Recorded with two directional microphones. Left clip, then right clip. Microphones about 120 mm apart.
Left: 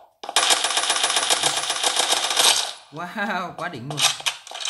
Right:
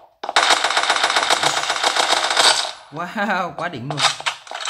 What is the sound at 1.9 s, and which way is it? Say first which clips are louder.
Machine gun: right 4 dB; 45° right (ahead or behind).